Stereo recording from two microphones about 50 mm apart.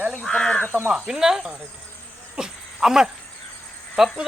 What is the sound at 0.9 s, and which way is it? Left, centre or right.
Speech, right.